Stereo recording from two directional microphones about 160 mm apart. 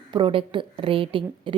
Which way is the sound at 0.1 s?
30° right (ahead or behind).